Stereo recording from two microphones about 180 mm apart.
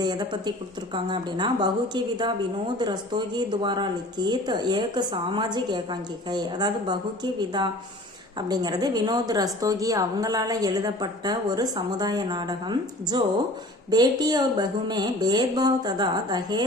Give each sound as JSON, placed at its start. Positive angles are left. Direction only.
{"t": 0.0, "sound": "a woman's voice", "side_deg": -25}